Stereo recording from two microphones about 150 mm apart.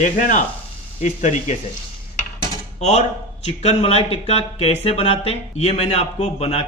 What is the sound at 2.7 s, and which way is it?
A man's voice, 50° left (ahead or behind).